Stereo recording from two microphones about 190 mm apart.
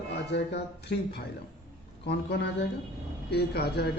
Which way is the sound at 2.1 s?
65° left (ahead or behind).